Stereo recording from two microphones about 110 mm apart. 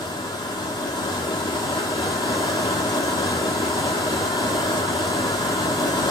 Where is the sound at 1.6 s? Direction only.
30° left (ahead or behind).